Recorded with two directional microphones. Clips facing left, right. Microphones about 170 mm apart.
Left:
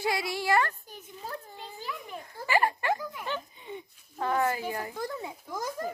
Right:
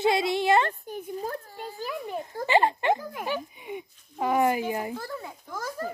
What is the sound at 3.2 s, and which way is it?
Speech, 10° right (ahead or behind).